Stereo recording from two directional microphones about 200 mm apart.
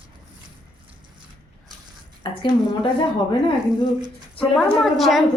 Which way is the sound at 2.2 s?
25° left (ahead or behind).